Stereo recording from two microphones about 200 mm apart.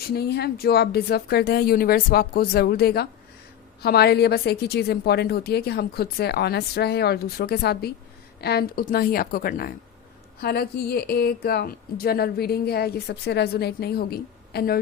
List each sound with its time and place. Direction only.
0.1 s a woman's voice: 55° left (ahead or behind)